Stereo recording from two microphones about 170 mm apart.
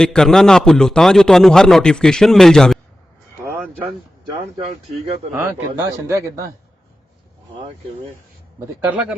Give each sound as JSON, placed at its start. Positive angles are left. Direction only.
{"t": 0.0, "sound": "a man's voice", "side_deg": 5}
{"t": 5.3, "sound": "a man's voice", "side_deg": -15}
{"t": 8.5, "sound": "a man's voice", "side_deg": -10}